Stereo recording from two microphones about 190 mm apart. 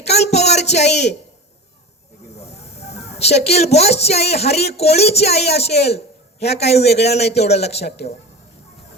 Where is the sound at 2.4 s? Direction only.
35° left (ahead or behind).